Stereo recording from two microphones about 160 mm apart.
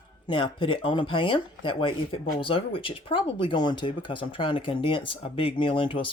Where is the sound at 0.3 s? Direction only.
30° left (ahead or behind).